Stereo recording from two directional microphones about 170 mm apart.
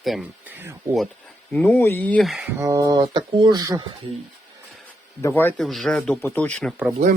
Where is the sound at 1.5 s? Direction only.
10° left (ahead or behind).